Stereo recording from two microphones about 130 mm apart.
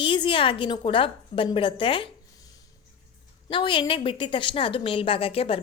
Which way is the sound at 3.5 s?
40° left (ahead or behind).